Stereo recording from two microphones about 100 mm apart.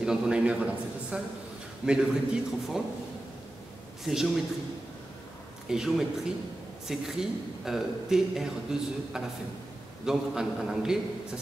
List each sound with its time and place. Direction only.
0.0 s a man's voice: 10° right (ahead or behind)
4.0 s speech: 5° right (ahead or behind)
5.7 s speech: 5° right (ahead or behind)